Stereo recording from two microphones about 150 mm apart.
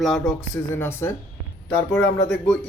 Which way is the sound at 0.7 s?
15° left (ahead or behind).